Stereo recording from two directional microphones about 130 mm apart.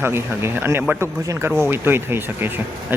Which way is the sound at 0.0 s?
15° right (ahead or behind).